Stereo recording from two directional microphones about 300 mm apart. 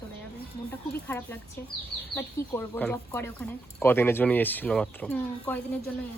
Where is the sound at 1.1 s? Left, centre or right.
Centre.